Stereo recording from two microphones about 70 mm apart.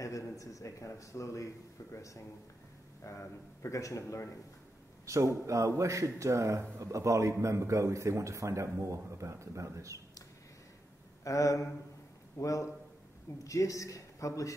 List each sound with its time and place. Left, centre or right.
0.0 s speech: left
5.0 s a man's voice: right
11.2 s speech: left